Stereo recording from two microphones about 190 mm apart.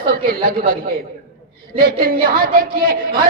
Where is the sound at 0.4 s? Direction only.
50° right (ahead or behind).